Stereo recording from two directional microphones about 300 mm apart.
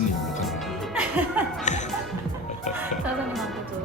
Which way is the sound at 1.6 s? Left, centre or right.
Left.